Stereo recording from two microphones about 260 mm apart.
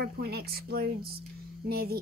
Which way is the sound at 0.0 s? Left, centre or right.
Right.